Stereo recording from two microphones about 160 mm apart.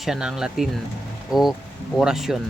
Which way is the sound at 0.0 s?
5° right (ahead or behind).